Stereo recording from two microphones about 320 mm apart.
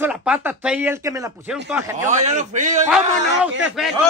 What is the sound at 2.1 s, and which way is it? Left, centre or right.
Speech, right.